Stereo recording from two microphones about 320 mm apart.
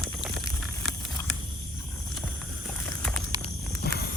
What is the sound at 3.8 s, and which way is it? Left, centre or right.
Walk, left.